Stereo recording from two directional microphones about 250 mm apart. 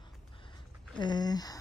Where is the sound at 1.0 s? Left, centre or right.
Centre.